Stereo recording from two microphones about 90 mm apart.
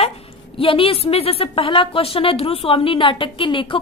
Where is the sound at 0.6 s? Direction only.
90° left.